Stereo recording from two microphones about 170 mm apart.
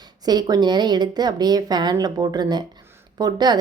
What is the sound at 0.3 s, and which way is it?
Speech, 25° right (ahead or behind).